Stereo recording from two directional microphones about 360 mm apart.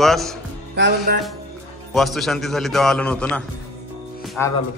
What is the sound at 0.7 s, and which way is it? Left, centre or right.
Music, right.